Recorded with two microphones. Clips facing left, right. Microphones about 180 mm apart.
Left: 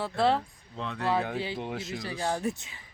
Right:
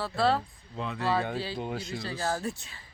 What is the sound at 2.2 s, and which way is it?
Speech, 20° left (ahead or behind).